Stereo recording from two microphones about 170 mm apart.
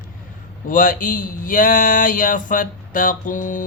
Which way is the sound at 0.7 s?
50° left (ahead or behind).